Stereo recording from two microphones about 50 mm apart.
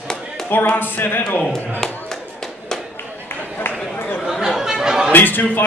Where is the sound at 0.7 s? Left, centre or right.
Left.